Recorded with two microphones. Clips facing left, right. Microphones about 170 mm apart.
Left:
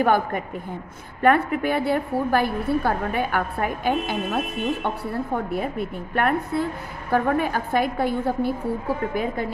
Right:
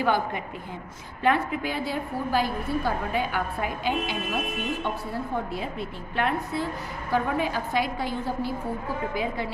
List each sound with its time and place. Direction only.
0.0 s a woman's voice: 50° left (ahead or behind)